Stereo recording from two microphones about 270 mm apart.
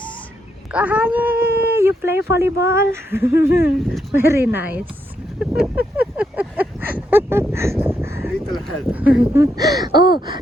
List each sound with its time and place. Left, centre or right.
0.7 s speech: centre
5.4 s a sound: centre
8.4 s speech: centre